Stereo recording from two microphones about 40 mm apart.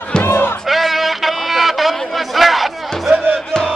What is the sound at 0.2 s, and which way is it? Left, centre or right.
Music, left.